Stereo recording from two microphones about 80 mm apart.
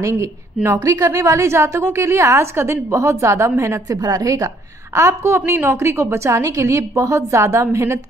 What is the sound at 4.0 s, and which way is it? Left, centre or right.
A woman's voice, right.